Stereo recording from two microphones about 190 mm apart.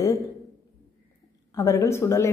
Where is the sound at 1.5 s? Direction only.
15° left (ahead or behind).